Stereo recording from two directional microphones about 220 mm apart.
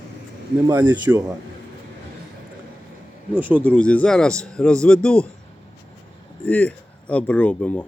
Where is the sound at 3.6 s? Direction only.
5° left (ahead or behind).